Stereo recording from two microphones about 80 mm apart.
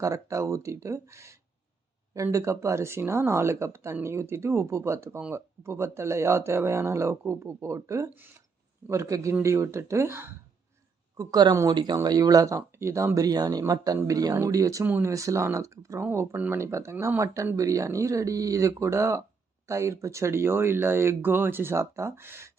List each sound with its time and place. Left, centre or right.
0.0 s speech: right
11.2 s speech: right
11.7 s speech: right
12.0 s speech: right
13.1 s speech: right